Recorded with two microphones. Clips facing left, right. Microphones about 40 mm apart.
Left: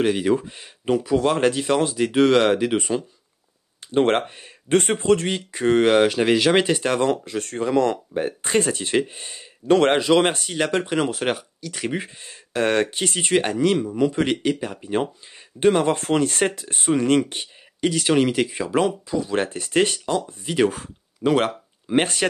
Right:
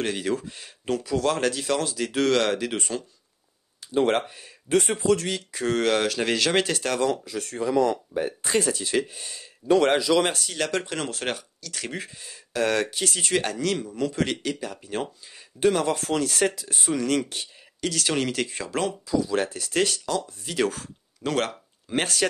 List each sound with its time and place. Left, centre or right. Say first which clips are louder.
0.0 s speech: left 7 dB; centre
3.8 s speech: left 3 dB; left
7.0 s speech: left 4 dB; left
9.7 s speech: left 3 dB; left
10.5 s speech: left 5 dB; left
12.2 s speech: left 1 dB; left; by 18.9 s centre
19.0 s speech: left 1 dB; left